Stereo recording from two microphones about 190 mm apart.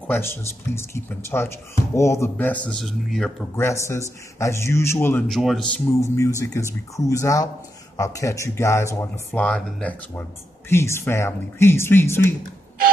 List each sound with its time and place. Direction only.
0.0 s speech: 10° left (ahead or behind)
3.5 s speech: 15° left (ahead or behind)
5.3 s speech: centre (ahead or behind)
5.9 s speech: 15° left (ahead or behind)